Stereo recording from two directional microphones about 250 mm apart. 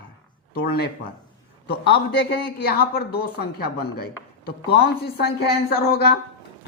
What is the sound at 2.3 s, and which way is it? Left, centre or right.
A man's voice, left.